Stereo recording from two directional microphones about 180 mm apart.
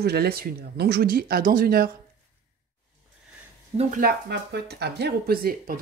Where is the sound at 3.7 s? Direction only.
45° right (ahead or behind).